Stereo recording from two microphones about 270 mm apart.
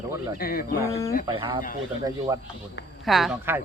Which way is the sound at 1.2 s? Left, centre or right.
Centre.